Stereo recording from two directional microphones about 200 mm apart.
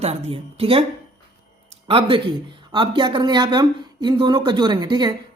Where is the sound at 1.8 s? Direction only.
25° right (ahead or behind).